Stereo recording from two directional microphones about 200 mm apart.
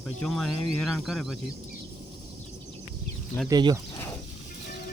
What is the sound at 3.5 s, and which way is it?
Speech, 20° right (ahead or behind).